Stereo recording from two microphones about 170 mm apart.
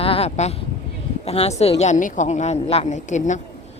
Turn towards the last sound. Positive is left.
turn(degrees=45)  # may be behind; listen again after turning